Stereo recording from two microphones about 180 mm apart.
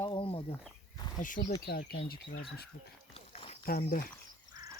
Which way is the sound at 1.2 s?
45° left (ahead or behind).